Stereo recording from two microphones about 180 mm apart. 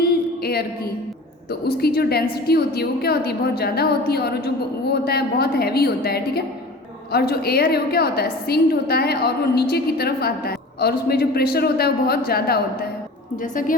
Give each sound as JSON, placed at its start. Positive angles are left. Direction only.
{"t": 0.0, "sound": "music", "side_deg": 60}
{"t": 1.6, "sound": "a woman's voice", "side_deg": 60}
{"t": 13.4, "sound": "a woman's voice", "side_deg": 50}